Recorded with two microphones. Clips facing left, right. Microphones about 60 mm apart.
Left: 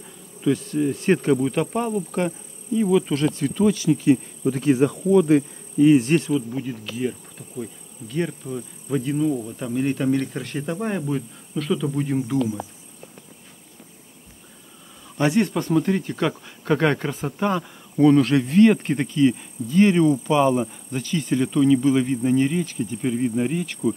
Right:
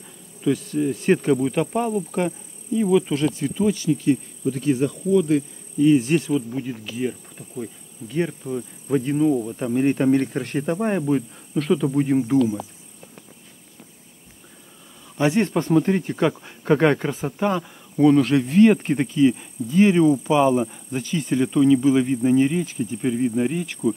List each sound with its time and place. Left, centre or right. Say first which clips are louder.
0.4 s speech: even; centre
3.9 s insect: left 2 dB; left
4.6 s insect: left 3 dB; left
5.9 s speech: left 1 dB; centre
6.3 s speech: even; centre
7.0 s insect: right 1 dB; centre
8.9 s speech: right 3 dB; right
11.5 s speech: right 3 dB; right
11.9 s speech: right 4 dB; right
15.1 s speech: right 1 dB; right; by 23.9 s centre